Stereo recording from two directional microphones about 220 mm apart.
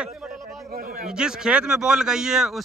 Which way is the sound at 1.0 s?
5° right (ahead or behind).